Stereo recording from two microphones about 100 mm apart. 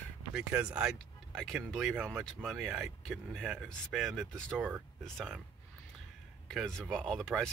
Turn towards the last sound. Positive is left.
turn(degrees=5)  # may be behind; listen again after turning